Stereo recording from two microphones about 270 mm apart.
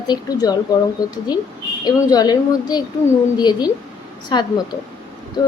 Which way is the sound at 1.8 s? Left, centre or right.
Centre.